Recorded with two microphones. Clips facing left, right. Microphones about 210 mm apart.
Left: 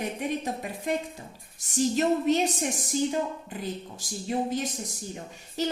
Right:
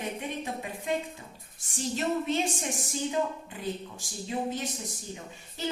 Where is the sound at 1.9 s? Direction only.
40° left (ahead or behind).